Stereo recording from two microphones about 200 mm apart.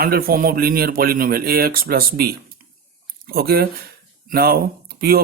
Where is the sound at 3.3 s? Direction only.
50° right (ahead or behind).